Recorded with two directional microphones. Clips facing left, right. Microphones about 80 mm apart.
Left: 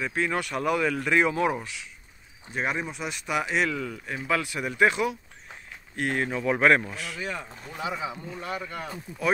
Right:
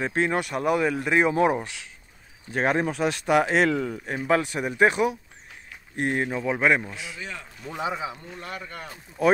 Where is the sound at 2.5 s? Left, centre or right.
Right.